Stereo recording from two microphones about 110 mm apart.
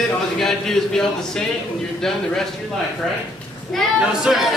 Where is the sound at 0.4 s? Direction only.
5° left (ahead or behind).